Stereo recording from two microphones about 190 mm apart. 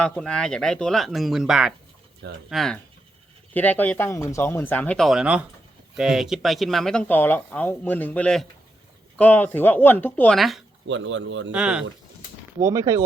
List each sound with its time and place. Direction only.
0.0 s speech: 5° left (ahead or behind)
10.8 s speech: 80° right
11.5 s speech: 5° right (ahead or behind)
12.5 s speech: 15° right (ahead or behind)